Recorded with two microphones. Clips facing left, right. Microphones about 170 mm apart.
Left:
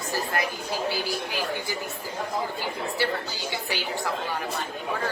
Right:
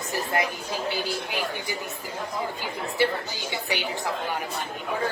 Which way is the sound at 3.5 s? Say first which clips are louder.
Right 2 dB; 20° right (ahead or behind).